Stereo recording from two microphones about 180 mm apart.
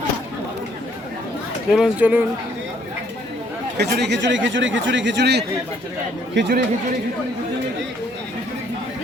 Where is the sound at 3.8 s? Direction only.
65° right (ahead or behind).